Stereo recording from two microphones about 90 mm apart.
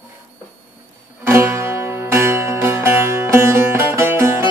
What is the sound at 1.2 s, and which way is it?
Music, 25° right (ahead or behind).